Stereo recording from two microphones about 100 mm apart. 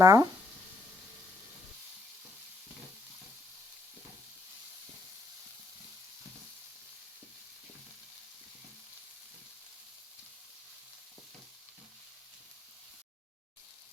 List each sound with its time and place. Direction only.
0.0 s speech: 35° right (ahead or behind)